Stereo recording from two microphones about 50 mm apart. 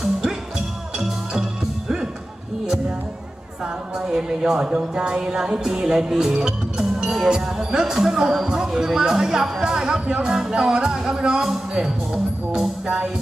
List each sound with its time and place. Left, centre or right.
0.0 s music: centre
3.6 s speech: centre
12.8 s music: centre